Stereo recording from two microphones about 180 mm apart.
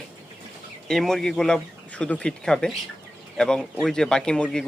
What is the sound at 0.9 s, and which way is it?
A man's voice, centre (ahead or behind).